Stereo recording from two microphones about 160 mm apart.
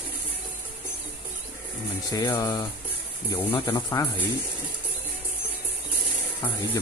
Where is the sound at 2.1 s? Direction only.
20° left (ahead or behind).